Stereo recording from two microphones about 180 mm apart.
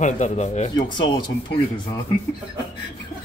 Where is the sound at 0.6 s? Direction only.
25° left (ahead or behind).